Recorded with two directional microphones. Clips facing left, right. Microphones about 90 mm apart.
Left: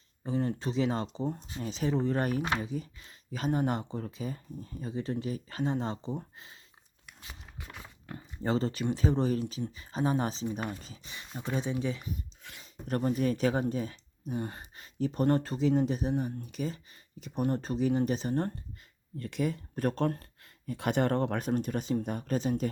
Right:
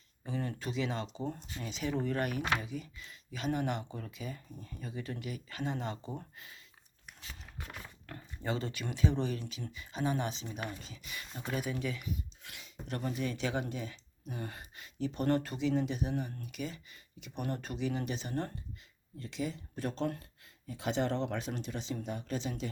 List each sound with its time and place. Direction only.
0.3 s speech: 30° left (ahead or behind)
1.2 s speech: 25° left (ahead or behind)
1.5 s speech: 35° left (ahead or behind)
8.4 s speech: 35° left (ahead or behind)
14.3 s speech: 30° left (ahead or behind)
19.2 s speech: 55° left (ahead or behind)